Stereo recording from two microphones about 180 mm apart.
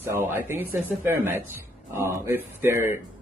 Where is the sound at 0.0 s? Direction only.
15° right (ahead or behind).